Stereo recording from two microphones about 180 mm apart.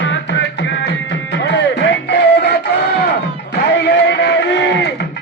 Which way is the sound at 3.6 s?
75° left (ahead or behind).